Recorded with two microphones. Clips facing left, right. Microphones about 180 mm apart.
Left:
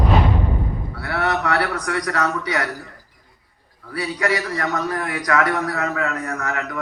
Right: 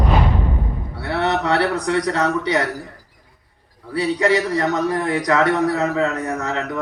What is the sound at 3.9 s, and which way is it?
A man's voice, 25° right (ahead or behind).